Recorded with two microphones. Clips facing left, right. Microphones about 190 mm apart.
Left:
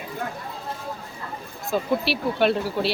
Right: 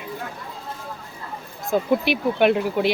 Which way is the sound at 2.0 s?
15° right (ahead or behind).